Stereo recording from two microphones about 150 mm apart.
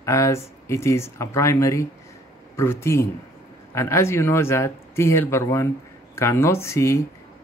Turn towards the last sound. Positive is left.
turn(degrees=20)  # may be behind; listen again after turning